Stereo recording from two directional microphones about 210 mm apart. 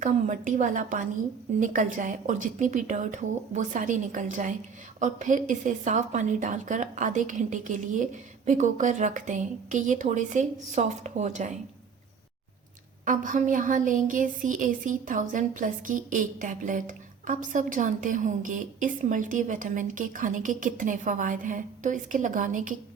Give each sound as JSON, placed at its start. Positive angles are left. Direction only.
{"t": 0.0, "sound": "speech", "side_deg": -40}
{"t": 13.1, "sound": "speech", "side_deg": -40}